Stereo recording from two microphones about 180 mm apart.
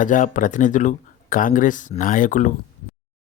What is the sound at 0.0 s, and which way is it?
Speech, 45° left (ahead or behind).